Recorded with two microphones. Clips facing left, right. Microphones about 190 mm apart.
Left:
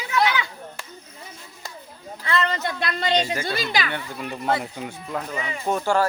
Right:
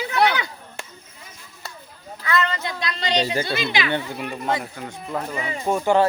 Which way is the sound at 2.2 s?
30° left (ahead or behind).